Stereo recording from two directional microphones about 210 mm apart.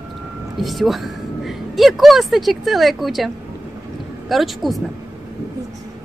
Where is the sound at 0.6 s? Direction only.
Centre (ahead or behind).